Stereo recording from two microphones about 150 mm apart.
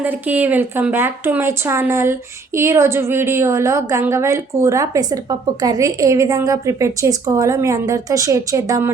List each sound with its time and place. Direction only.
0.0 s speech: 10° right (ahead or behind)